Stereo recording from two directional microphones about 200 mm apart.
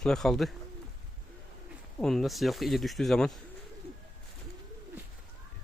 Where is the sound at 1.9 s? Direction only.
Centre (ahead or behind).